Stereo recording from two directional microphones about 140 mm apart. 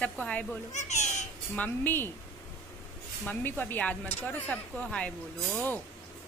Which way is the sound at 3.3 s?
15° left (ahead or behind).